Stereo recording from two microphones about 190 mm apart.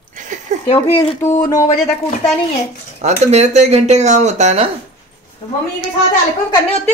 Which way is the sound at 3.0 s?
35° right (ahead or behind).